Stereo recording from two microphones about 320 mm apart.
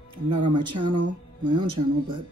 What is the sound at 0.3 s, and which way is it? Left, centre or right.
Speech, right.